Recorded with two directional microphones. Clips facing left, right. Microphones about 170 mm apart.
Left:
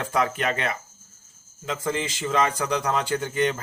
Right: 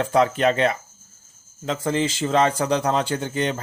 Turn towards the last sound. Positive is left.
turn(degrees=-30)  # may be behind; listen again after turning